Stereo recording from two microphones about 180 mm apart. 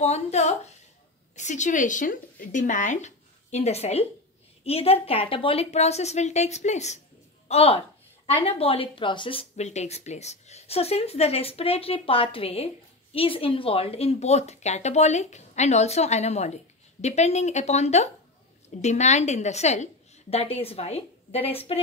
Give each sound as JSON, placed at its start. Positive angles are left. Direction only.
{"t": 0.0, "sound": "a woman's voice", "side_deg": 35}